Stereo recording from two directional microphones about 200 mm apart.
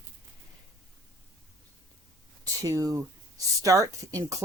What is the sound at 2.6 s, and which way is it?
Speech, 15° right (ahead or behind).